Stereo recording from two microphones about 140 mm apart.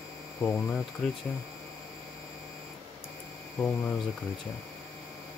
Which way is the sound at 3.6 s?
10° left (ahead or behind).